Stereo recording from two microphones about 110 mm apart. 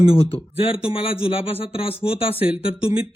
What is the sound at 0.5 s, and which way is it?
A man's voice, 60° left (ahead or behind).